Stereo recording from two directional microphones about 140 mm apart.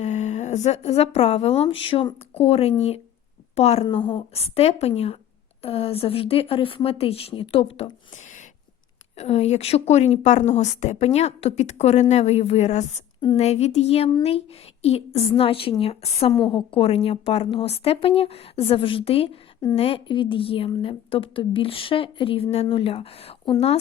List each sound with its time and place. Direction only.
0.0 s a woman's voice: 55° left (ahead or behind)
8.1 s a sound: 60° left (ahead or behind)
9.1 s speech: 50° left (ahead or behind)
16.4 s speech: 35° left (ahead or behind)